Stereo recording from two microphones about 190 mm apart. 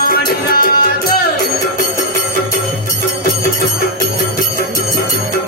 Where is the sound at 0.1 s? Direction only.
50° left (ahead or behind).